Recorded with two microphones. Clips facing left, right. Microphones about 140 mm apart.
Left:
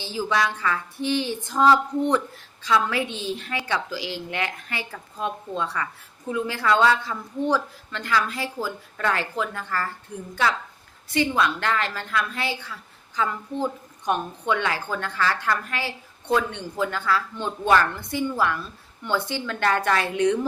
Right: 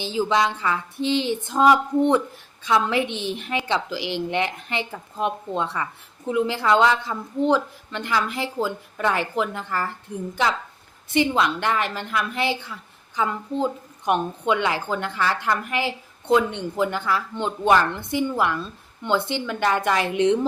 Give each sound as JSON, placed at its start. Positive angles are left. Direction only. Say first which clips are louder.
{"t": 0.0, "sound": "a woman's voice", "louder": "right 3 dB", "side_deg": -20}
{"t": 11.1, "sound": "a woman's voice", "louder": "right 2 dB", "side_deg": -20}